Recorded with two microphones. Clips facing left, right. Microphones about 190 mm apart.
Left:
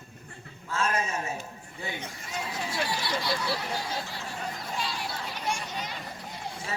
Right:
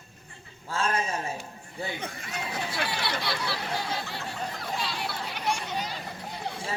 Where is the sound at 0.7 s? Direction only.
30° right (ahead or behind).